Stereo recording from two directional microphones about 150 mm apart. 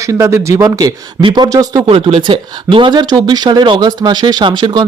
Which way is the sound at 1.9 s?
40° right (ahead or behind).